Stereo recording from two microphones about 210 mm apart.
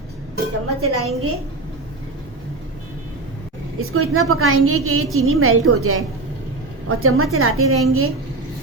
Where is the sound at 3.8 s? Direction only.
85° right.